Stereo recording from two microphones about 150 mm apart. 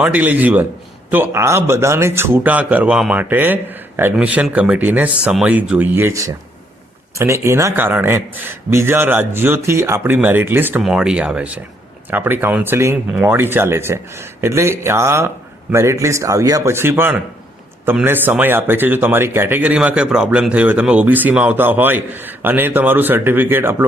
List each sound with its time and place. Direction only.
0.0 s a man's voice: 10° right (ahead or behind)